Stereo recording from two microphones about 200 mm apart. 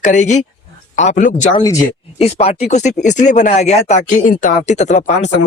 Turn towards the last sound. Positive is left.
turn(degrees=35)  # may be behind; listen again after turning